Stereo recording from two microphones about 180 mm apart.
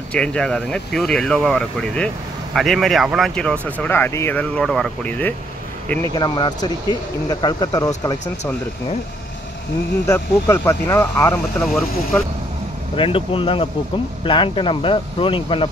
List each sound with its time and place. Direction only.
0.1 s speech: 5° left (ahead or behind)
6.1 s speech: 25° left (ahead or behind)
10.0 s speech: 15° left (ahead or behind)
12.9 s speech: 30° left (ahead or behind)